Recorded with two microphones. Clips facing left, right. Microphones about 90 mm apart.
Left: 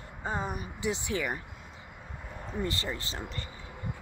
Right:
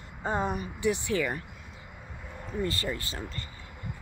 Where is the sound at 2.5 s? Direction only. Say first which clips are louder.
Right 2 dB; 20° left (ahead or behind).